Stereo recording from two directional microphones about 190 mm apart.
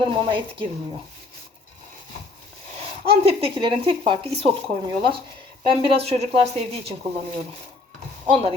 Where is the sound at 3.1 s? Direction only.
30° right (ahead or behind).